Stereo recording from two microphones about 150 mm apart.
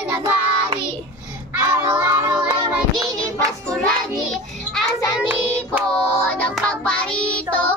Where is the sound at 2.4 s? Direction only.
35° right (ahead or behind).